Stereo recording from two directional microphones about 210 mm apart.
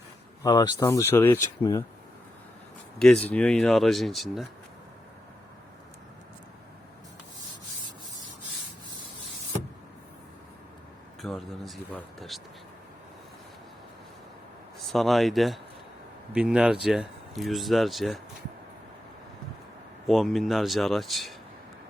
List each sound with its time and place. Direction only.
0.4 s speech: 20° left (ahead or behind)
3.0 s speech: 5° left (ahead or behind)
11.2 s a sound: centre (ahead or behind)
14.9 s speech: centre (ahead or behind)
20.1 s speech: centre (ahead or behind)